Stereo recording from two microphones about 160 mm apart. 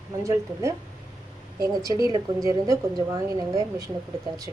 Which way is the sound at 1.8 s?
20° right (ahead or behind).